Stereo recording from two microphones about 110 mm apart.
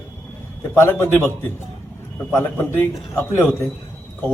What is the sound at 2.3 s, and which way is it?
A man's voice, 20° left (ahead or behind).